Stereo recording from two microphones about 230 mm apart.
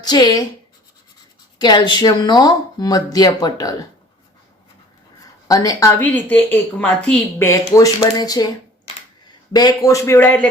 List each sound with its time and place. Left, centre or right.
0.0 s speech: centre
1.5 s speech: centre
5.5 s speech: centre
9.5 s speech: centre